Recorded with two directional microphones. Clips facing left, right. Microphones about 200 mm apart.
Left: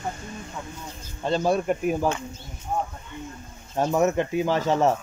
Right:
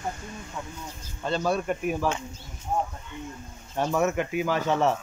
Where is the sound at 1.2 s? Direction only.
35° left (ahead or behind).